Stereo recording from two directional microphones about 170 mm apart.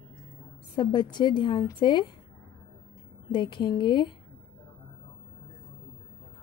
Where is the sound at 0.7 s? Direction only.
25° left (ahead or behind).